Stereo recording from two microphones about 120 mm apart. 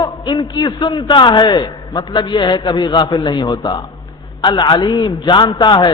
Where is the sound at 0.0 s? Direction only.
35° left (ahead or behind).